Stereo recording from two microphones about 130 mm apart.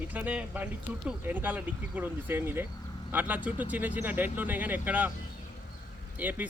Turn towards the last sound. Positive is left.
turn(degrees=-10)  # may be behind; listen again after turning